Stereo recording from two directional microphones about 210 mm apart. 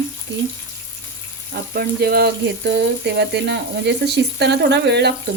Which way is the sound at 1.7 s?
45° right (ahead or behind).